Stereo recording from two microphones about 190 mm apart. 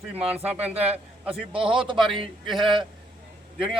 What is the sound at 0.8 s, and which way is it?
Speech, 10° right (ahead or behind).